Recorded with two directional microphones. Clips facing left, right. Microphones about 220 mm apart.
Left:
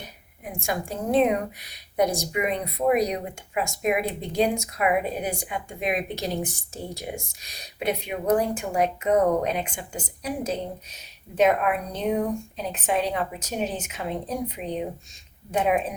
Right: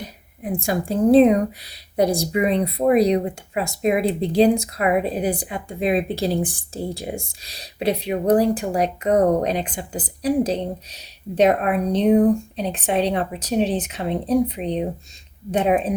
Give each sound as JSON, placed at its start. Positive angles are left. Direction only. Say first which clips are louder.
{"t": 0.4, "sound": "a woman's voice", "louder": "right 7 dB", "side_deg": -30}